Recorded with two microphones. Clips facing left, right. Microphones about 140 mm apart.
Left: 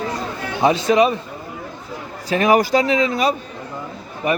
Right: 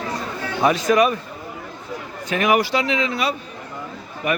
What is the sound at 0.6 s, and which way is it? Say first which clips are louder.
Speech: left 2 dB; 30° left (ahead or behind).